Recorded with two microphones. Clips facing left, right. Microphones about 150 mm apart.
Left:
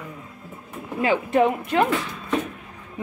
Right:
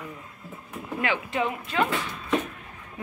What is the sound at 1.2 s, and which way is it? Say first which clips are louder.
Speech: left 9 dB; 55° left (ahead or behind).